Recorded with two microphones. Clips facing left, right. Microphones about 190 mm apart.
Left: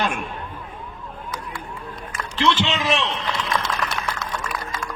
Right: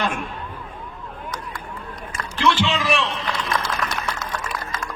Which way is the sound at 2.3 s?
20° left (ahead or behind).